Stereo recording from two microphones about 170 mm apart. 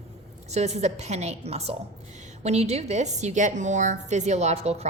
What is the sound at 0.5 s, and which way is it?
A woman's voice, 40° right (ahead or behind).